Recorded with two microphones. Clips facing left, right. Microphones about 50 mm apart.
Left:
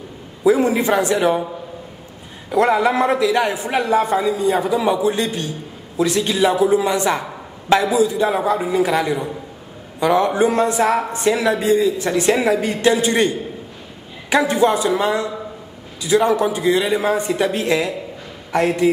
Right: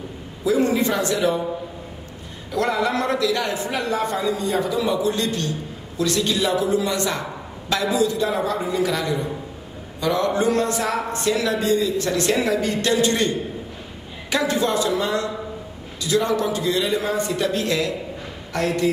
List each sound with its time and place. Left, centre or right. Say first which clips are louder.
0.6 s a man's voice: left 3 dB; centre
2.5 s a man's voice: left 6 dB; centre
14.3 s a man's voice: left 5 dB; left